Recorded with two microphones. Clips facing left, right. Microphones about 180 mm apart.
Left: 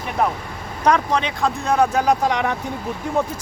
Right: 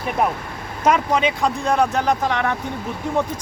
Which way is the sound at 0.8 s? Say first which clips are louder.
Right 1 dB; 5° right (ahead or behind).